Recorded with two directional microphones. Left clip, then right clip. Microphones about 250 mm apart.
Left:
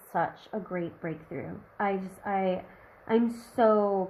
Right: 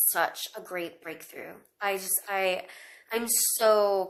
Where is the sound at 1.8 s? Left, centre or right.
Centre.